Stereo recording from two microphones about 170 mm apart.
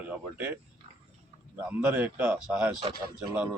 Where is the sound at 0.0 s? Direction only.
10° right (ahead or behind).